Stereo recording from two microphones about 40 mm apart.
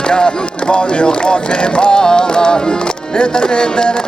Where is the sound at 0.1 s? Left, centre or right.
Left.